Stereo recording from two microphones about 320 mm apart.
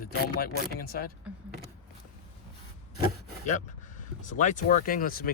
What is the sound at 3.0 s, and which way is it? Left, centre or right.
Rub, left.